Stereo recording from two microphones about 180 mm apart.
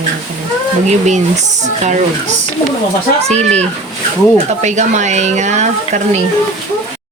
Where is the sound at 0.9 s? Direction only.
40° right (ahead or behind).